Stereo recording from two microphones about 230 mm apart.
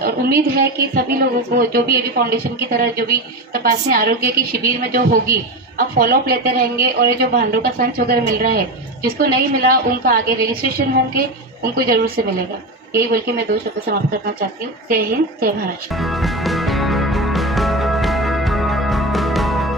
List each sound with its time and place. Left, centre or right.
0.0 s a woman's voice: right
14.8 s a woman's voice: right
16.0 s music: centre